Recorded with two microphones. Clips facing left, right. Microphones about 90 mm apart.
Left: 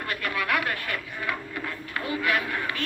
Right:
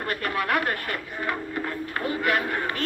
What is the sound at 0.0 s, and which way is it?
Speech, 35° right (ahead or behind).